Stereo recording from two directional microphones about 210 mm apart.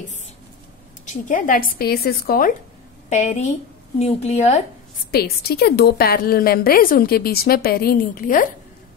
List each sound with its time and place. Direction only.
1.0 s a woman's voice: 40° left (ahead or behind)
5.1 s a woman's voice: 50° left (ahead or behind)